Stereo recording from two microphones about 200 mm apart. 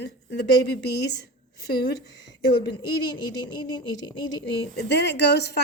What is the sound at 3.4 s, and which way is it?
Speech, 20° left (ahead or behind).